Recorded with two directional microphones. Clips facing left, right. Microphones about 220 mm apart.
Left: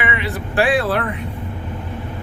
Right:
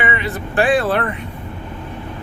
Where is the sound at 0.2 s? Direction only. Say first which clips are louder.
Right 1 dB; centre (ahead or behind).